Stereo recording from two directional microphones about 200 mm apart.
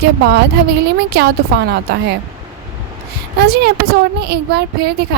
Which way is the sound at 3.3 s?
55° right (ahead or behind).